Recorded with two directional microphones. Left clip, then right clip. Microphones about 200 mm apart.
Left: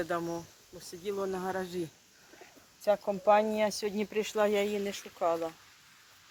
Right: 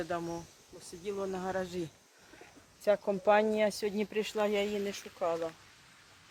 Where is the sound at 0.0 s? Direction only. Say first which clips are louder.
Left 3 dB; 25° left (ahead or behind).